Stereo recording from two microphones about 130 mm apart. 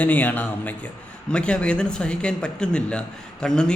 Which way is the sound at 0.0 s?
15° left (ahead or behind).